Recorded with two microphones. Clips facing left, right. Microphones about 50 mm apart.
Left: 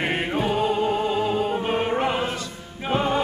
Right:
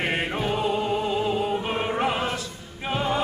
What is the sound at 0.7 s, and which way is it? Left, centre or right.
Music, centre.